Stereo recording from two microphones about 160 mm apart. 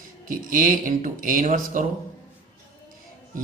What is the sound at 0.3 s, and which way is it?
Speech, 55° right (ahead or behind).